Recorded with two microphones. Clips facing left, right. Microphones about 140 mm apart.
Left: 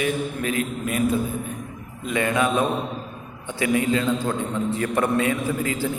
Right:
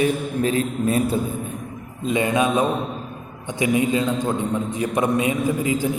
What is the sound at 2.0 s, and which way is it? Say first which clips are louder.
A man's voice: right 2 dB; 20° right (ahead or behind).